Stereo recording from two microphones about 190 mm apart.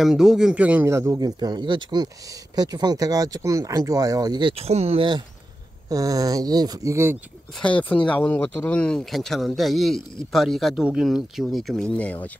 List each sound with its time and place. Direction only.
0.0 s a man's voice: centre (ahead or behind)
7.5 s speech: 5° left (ahead or behind)